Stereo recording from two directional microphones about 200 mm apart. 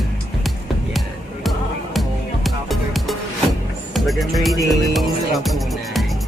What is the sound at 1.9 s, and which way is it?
Music, centre (ahead or behind).